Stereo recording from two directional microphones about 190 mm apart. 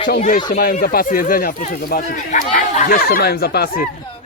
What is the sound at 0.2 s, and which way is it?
Speech, 45° left (ahead or behind).